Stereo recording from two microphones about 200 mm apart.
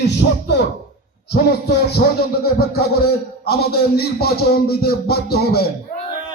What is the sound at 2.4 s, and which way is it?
Speech, 50° left (ahead or behind).